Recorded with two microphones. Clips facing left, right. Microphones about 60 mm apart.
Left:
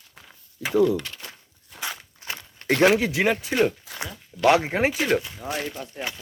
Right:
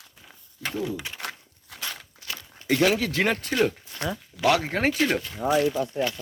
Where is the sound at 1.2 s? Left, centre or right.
Right.